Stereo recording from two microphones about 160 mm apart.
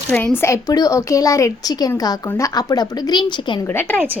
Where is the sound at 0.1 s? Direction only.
10° left (ahead or behind); by 3.6 s 30° left (ahead or behind).